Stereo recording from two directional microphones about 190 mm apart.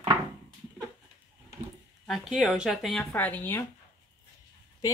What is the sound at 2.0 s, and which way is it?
Speech, centre (ahead or behind).